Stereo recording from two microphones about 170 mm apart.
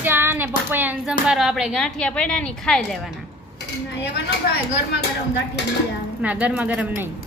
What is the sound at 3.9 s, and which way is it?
Speech, 90° left.